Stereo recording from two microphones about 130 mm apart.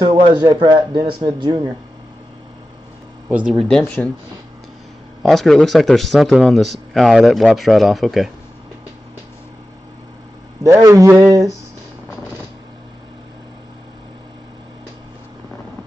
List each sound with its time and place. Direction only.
0.0 s speech: 35° right (ahead or behind)
3.4 s speech: centre (ahead or behind)
3.8 s speech: 15° left (ahead or behind)
5.2 s speech: centre (ahead or behind)
10.6 s speech: 25° right (ahead or behind)